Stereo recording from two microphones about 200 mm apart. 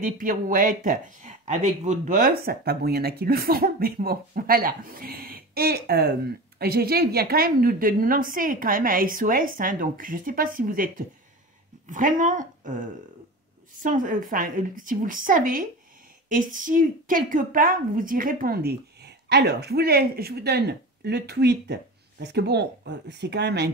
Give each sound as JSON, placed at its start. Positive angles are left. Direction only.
{"t": 0.0, "sound": "speech", "side_deg": -40}
{"t": 13.8, "sound": "speech", "side_deg": -40}